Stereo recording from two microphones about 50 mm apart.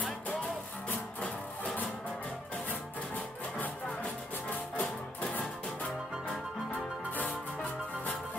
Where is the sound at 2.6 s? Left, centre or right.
Left.